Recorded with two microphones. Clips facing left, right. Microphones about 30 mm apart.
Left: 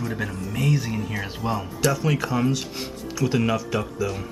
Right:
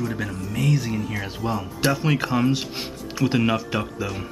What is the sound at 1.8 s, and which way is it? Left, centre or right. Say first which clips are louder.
Speech: right 1 dB; right.